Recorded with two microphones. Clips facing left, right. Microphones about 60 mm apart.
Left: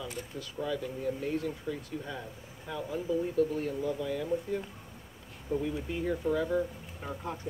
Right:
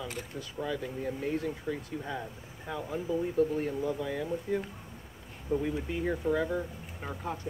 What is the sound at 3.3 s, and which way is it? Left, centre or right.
Speech, right.